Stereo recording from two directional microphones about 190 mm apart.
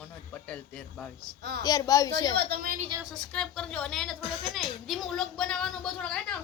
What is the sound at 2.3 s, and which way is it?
Speech, 50° right (ahead or behind).